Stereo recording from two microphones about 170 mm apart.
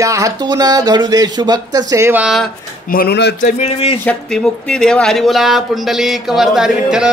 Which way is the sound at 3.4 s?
45° left (ahead or behind).